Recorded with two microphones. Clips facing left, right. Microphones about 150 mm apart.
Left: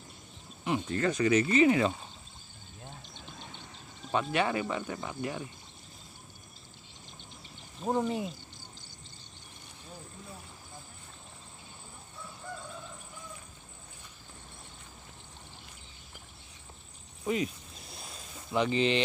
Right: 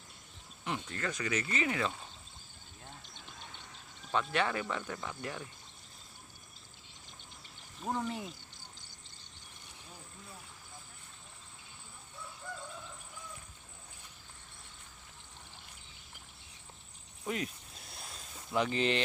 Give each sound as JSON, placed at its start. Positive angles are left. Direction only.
{"t": 0.7, "sound": "speech", "side_deg": 25}
{"t": 4.1, "sound": "speech", "side_deg": 10}
{"t": 7.8, "sound": "speech", "side_deg": 20}
{"t": 17.3, "sound": "a sound", "side_deg": 0}